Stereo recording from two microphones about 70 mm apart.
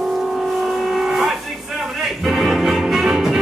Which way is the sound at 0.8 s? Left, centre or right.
Centre.